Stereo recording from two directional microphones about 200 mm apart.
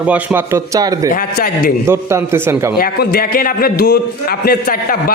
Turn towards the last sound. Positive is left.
turn(degrees=50)  # may be behind; listen again after turning